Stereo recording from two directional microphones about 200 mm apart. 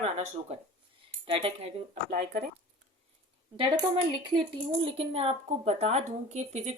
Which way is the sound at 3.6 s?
25° right (ahead or behind).